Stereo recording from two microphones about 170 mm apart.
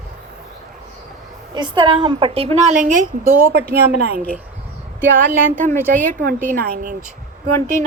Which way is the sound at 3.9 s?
65° right (ahead or behind).